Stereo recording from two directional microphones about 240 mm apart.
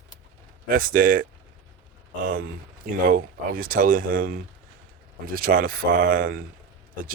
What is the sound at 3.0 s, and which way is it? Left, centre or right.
Speech, right.